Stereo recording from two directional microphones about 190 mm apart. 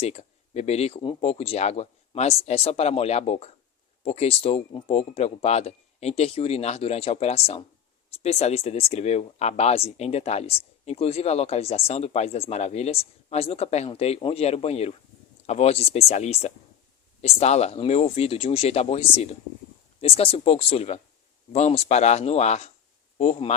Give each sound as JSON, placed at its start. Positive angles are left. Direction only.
{"t": 0.0, "sound": "speech", "side_deg": 35}